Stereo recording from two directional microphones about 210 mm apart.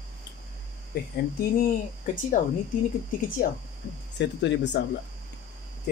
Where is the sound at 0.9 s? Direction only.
50° left (ahead or behind).